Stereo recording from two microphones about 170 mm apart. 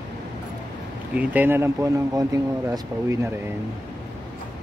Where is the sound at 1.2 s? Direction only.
10° right (ahead or behind).